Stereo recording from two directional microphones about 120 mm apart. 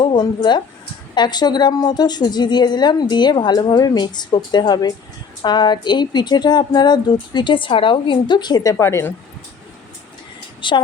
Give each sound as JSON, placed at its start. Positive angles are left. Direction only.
{"t": 1.1, "sound": "a woman's voice", "side_deg": 35}
{"t": 8.8, "sound": "a woman's voice", "side_deg": 20}
{"t": 10.6, "sound": "a woman's voice", "side_deg": 40}